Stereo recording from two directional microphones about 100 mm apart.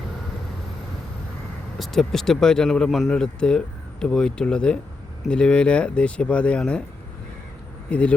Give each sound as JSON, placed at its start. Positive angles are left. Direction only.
{"t": 1.8, "sound": "speech", "side_deg": 5}
{"t": 7.9, "sound": "speech", "side_deg": 10}